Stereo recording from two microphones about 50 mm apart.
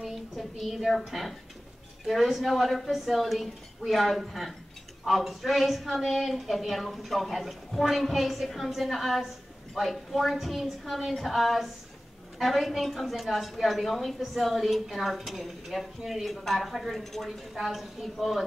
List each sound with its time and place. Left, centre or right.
0.0 s a woman's voice: centre